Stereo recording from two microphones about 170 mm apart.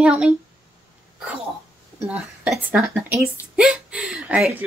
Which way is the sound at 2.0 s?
5° right (ahead or behind).